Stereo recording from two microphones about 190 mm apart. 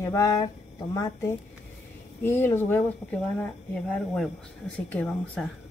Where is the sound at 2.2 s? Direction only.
10° left (ahead or behind).